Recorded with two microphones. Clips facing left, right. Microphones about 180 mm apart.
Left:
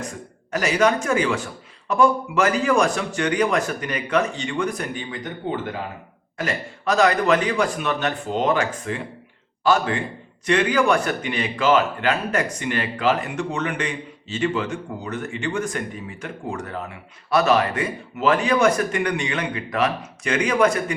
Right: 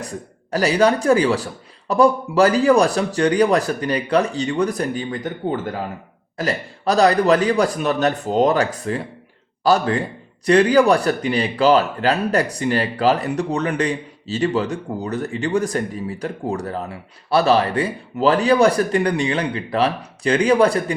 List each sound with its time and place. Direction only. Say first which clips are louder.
0.5 s speech: right 3 dB; 35° right (ahead or behind)